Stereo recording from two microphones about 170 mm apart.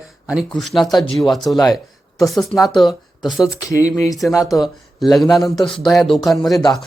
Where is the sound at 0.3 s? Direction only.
5° right (ahead or behind).